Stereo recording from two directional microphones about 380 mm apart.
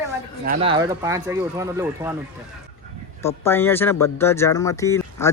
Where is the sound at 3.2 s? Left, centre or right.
Centre.